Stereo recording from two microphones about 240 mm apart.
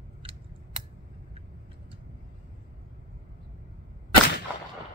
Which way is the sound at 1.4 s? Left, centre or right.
Right.